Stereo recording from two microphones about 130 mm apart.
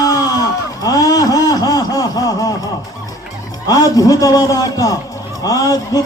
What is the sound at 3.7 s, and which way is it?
Speech, 25° left (ahead or behind).